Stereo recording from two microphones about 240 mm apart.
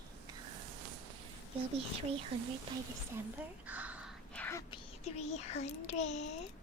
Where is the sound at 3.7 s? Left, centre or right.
Centre.